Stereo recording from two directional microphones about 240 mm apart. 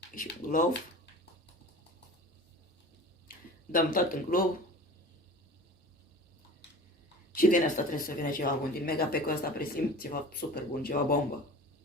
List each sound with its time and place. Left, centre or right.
0.1 s speech: left
3.2 s speech: left
7.3 s speech: left